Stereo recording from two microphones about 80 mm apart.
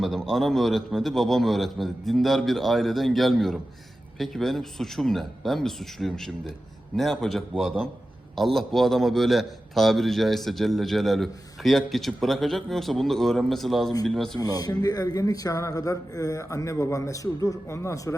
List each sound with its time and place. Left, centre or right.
0.0 s a man's voice: centre
14.3 s speech: left